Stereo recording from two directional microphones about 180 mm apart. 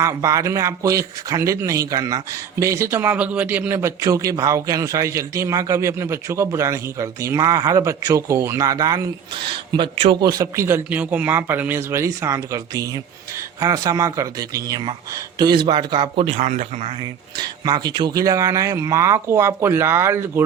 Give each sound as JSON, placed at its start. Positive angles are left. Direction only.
{"t": 0.0, "sound": "speech", "side_deg": -15}
{"t": 17.0, "sound": "speech", "side_deg": -25}